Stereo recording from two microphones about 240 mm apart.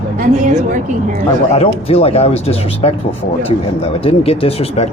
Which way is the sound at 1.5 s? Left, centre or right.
Left.